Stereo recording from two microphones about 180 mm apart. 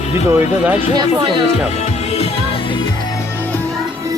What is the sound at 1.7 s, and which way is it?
Music, 40° left (ahead or behind).